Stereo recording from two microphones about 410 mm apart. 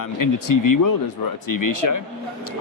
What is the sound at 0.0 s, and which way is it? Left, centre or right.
Speech, left.